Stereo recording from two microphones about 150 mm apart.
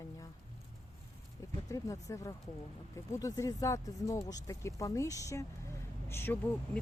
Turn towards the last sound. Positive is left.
turn(degrees=15)  # may be behind; listen again after turning